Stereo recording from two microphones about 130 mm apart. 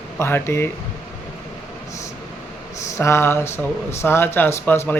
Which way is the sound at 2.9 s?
20° left (ahead or behind).